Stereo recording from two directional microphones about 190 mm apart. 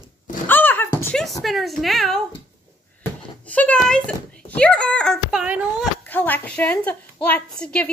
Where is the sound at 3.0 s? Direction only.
10° left (ahead or behind).